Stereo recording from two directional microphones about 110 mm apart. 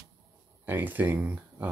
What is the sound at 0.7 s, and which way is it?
Speech, 15° right (ahead or behind).